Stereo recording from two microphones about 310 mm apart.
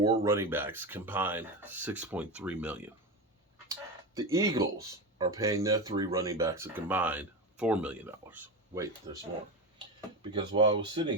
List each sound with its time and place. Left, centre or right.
0.0 s speech: centre
10.3 s speech: centre